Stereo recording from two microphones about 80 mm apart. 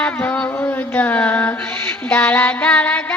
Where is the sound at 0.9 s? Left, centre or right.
Centre.